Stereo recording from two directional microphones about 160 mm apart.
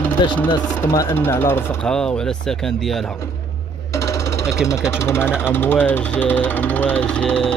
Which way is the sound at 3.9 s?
20° left (ahead or behind).